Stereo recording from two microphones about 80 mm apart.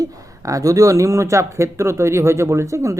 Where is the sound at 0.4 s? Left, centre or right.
Right.